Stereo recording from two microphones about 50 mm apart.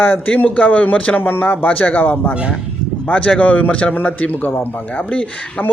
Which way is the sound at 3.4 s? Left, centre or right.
Left.